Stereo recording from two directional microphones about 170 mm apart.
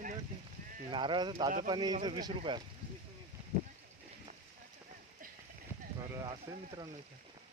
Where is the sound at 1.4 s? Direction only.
40° right (ahead or behind).